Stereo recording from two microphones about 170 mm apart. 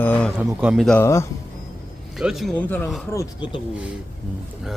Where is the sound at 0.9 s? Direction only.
15° left (ahead or behind).